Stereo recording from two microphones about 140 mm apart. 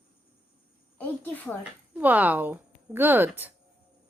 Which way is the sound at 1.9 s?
10° right (ahead or behind).